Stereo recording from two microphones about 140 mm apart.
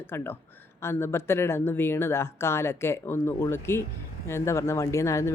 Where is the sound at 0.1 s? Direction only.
15° left (ahead or behind).